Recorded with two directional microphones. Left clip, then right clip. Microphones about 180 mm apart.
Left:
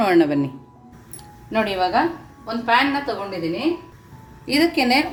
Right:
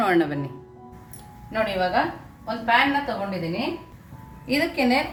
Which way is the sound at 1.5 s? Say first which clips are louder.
Left 3 dB; 60° left (ahead or behind).